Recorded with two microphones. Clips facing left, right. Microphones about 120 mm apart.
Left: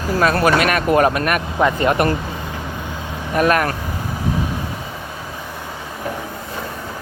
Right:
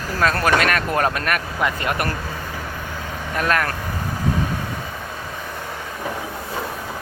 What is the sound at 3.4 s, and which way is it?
Speech, 15° left (ahead or behind).